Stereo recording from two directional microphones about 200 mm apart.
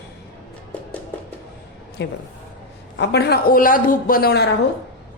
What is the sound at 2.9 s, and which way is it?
A man's voice, 60° left (ahead or behind).